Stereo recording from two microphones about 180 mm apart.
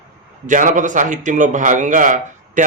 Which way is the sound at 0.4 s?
45° right (ahead or behind).